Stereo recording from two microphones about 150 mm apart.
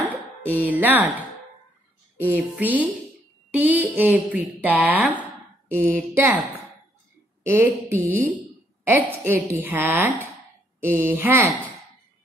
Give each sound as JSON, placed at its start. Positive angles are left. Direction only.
{"t": 0.6, "sound": "speech", "side_deg": -10}
{"t": 2.2, "sound": "speech", "side_deg": -10}
{"t": 7.4, "sound": "speech", "side_deg": -15}